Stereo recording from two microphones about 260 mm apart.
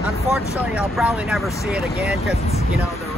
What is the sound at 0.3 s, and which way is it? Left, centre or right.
Speech, centre.